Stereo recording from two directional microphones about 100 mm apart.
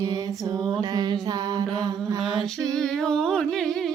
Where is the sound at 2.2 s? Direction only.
Centre (ahead or behind).